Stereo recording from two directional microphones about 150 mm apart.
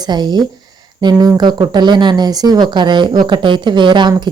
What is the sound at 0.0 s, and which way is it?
Speech, 30° right (ahead or behind).